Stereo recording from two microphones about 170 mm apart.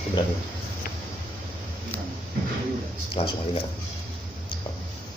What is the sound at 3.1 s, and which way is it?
Speech, 35° left (ahead or behind).